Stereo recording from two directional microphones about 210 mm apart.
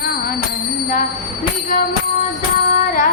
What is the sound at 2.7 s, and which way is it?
Music, 40° left (ahead or behind).